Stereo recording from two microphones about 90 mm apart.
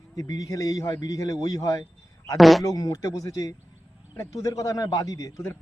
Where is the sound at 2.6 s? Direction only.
40° left (ahead or behind).